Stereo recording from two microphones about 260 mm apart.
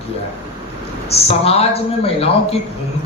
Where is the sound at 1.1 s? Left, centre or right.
Left.